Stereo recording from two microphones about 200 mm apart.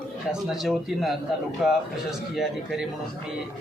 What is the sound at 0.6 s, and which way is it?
Speech, centre (ahead or behind).